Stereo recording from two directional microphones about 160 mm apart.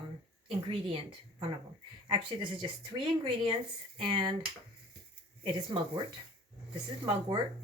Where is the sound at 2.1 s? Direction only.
30° right (ahead or behind).